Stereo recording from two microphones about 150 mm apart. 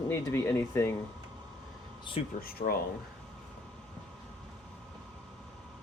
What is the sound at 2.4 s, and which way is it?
Speech, 85° left.